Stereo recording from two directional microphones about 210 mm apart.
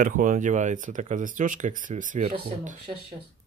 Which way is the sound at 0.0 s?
40° right (ahead or behind).